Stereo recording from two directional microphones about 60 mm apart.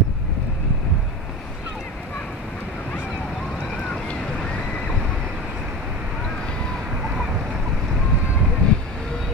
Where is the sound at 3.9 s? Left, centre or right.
Centre.